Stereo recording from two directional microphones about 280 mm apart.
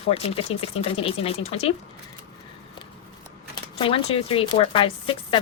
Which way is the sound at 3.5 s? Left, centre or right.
Centre.